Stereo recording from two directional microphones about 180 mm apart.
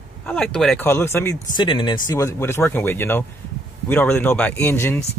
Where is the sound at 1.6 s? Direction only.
25° left (ahead or behind).